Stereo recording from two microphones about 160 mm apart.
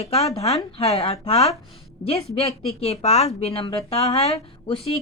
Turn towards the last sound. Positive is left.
turn(degrees=35)  # may be behind; listen again after turning